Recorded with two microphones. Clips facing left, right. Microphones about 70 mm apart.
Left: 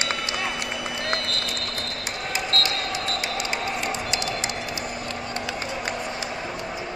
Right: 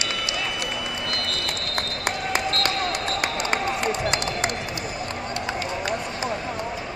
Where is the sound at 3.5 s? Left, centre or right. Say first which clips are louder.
Right 3 dB; right.